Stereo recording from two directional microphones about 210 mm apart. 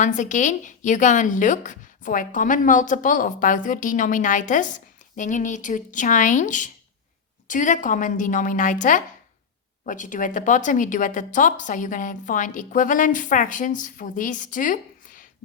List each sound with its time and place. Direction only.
0.0 s a woman's voice: 35° left (ahead or behind)